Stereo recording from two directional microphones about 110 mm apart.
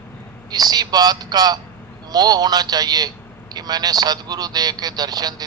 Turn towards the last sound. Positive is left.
turn(degrees=-35)  # may be behind; listen again after turning